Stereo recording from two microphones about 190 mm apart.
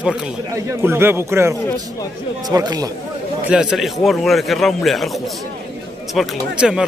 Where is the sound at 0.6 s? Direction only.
10° right (ahead or behind).